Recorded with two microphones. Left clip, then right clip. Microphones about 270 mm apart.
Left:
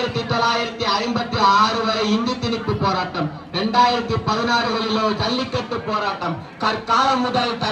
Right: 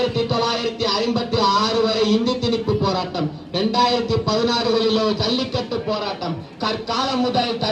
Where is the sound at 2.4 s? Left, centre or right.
Centre.